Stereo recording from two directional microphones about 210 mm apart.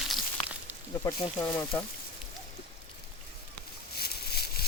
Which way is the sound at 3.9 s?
50° left (ahead or behind).